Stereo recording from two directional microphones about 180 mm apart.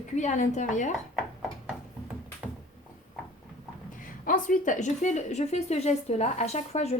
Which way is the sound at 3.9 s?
50° left (ahead or behind).